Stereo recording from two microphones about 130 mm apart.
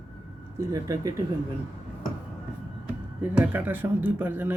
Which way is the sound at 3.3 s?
15° right (ahead or behind).